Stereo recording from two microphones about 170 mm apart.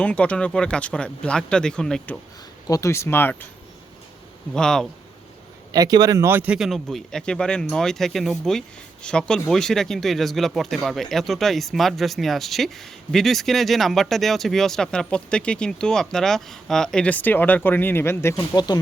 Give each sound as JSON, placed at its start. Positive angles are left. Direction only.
{"t": 0.0, "sound": "speech", "side_deg": 5}
{"t": 2.6, "sound": "speech", "side_deg": 20}
{"t": 4.5, "sound": "speech", "side_deg": 5}
{"t": 5.7, "sound": "speech", "side_deg": -20}